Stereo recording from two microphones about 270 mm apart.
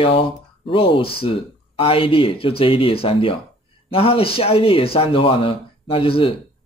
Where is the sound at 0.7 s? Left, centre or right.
Centre.